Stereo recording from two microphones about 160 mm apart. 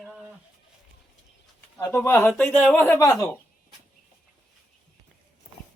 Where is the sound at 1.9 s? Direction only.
15° left (ahead or behind).